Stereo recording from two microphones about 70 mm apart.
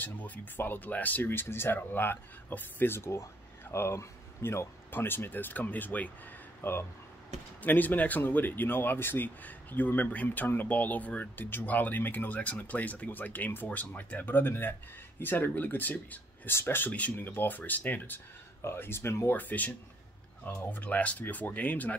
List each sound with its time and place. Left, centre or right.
0.0 s speech: left
6.6 s speech: left
18.6 s speech: left
19.3 s speech: left